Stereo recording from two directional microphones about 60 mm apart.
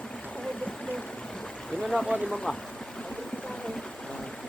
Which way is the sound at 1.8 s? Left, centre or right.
Centre.